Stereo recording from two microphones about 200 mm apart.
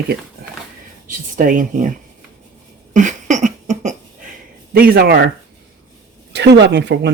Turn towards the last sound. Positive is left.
turn(degrees=-60)  # may be behind; listen again after turning